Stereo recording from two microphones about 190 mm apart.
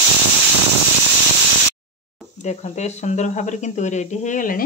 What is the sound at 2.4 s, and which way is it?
Speech, 35° left (ahead or behind).